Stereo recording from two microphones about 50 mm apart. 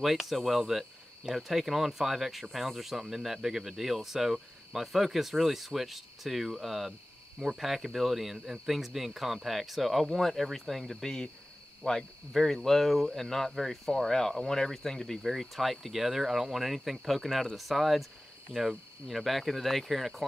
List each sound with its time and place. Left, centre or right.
0.0 s speech: centre
12.3 s speech: centre